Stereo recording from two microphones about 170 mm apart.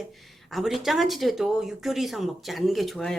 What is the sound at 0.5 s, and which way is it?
Speech, centre (ahead or behind).